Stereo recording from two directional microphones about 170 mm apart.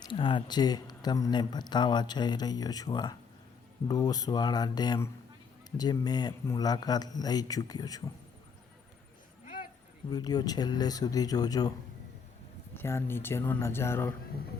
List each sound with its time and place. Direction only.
0.0 s speech: 30° left (ahead or behind)
10.1 s speech: 25° left (ahead or behind)
12.7 s speech: 15° left (ahead or behind)